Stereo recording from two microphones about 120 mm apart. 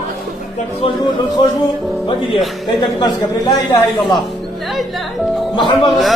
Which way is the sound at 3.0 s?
35° left (ahead or behind).